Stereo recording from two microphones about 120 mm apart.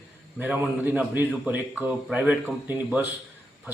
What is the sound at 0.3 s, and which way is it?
A man's voice, 15° right (ahead or behind).